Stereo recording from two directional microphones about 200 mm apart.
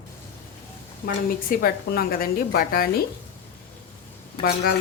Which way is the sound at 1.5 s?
50° left (ahead or behind).